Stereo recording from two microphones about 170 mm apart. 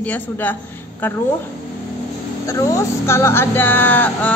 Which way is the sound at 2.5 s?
20° left (ahead or behind).